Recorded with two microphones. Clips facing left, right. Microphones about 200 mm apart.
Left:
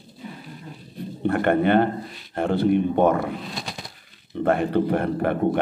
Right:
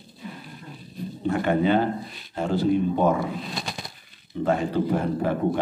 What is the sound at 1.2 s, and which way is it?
A man's voice, 60° left (ahead or behind).